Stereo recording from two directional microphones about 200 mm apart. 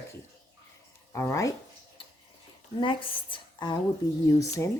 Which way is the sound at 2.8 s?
25° left (ahead or behind).